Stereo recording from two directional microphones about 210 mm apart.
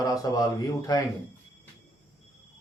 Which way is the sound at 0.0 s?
15° left (ahead or behind).